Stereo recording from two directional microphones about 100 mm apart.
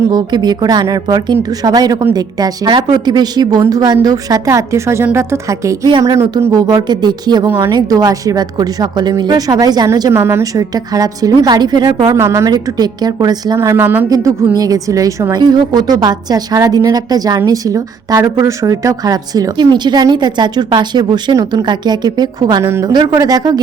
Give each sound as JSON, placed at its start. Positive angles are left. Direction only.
{"t": 0.1, "sound": "a woman's voice", "side_deg": -45}
{"t": 10.1, "sound": "a woman's voice", "side_deg": -25}
{"t": 10.4, "sound": "a woman's voice", "side_deg": -35}
{"t": 12.0, "sound": "a woman's voice", "side_deg": -30}
{"t": 12.5, "sound": "a woman's voice", "side_deg": -40}
{"t": 13.6, "sound": "a woman's voice", "side_deg": -25}
{"t": 14.1, "sound": "a woman's voice", "side_deg": -35}
{"t": 22.6, "sound": "a woman's voice", "side_deg": -30}
{"t": 22.9, "sound": "a woman's voice", "side_deg": -45}